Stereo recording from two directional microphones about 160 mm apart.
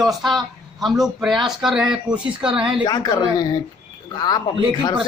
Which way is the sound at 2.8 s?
25° left (ahead or behind).